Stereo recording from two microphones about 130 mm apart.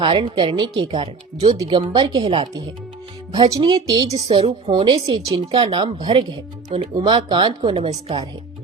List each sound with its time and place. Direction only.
0.0 s speech: 45° right (ahead or behind)
4.1 s speech: 45° right (ahead or behind); by 5.4 s 30° right (ahead or behind)
5.5 s speech: 45° right (ahead or behind)
5.8 s speech: 35° right (ahead or behind)